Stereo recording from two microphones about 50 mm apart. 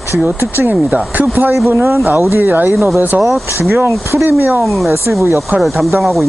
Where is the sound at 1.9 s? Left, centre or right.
Right.